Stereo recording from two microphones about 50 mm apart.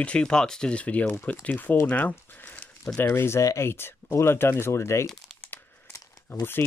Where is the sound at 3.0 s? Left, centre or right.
Left.